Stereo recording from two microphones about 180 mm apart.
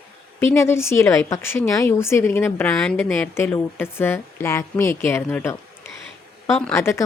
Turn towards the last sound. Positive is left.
turn(degrees=15)  # may be behind; listen again after turning